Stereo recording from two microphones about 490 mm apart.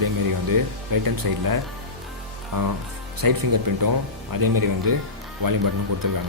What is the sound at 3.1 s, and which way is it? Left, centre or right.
Speech, right.